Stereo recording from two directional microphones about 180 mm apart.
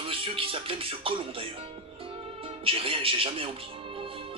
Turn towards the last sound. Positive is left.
turn(degrees=-30)  # may be behind; listen again after turning